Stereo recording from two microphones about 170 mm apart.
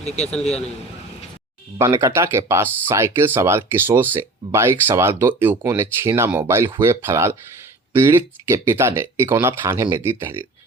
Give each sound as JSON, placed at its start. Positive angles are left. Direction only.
{"t": 0.0, "sound": "a man's voice", "side_deg": 40}
{"t": 1.8, "sound": "speech", "side_deg": -15}